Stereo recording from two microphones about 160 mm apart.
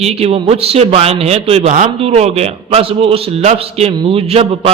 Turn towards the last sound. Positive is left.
turn(degrees=-40)  # may be behind; listen again after turning